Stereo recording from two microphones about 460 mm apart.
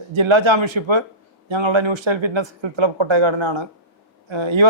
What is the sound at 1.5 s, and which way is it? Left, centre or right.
A man's voice, right.